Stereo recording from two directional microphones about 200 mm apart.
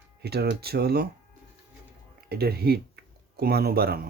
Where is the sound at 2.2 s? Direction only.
50° right (ahead or behind).